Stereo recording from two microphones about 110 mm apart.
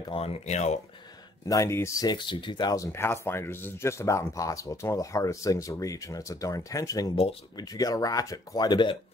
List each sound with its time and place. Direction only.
0.1 s speech: 65° left (ahead or behind); by 0.7 s 90° left
1.5 s speech: 25° left (ahead or behind)
2.0 s speech: 45° left (ahead or behind)